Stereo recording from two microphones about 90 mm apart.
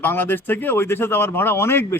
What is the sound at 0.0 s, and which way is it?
Speech, 25° left (ahead or behind).